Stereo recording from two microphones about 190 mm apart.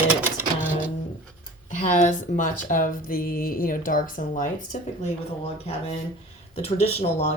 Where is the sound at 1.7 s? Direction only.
40° left (ahead or behind).